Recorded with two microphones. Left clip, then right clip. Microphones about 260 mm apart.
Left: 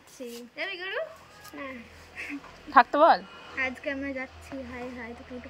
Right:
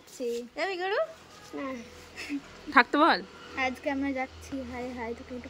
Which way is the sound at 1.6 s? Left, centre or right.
Centre.